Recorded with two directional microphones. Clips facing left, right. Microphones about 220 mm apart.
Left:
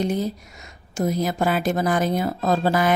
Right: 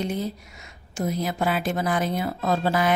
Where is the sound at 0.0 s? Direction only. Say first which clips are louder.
Left 4 dB; 40° left (ahead or behind).